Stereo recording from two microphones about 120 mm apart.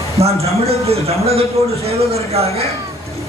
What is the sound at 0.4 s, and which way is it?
A man's voice, 55° right (ahead or behind).